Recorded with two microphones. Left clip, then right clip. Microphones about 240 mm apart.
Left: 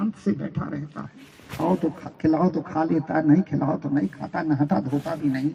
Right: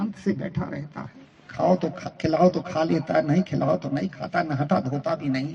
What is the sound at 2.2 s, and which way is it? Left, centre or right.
A man's voice, right.